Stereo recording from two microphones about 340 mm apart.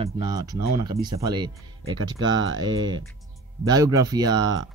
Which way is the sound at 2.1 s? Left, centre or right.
Right.